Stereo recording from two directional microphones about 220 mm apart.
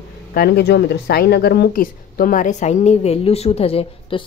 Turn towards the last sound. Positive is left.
turn(degrees=25)  # may be behind; listen again after turning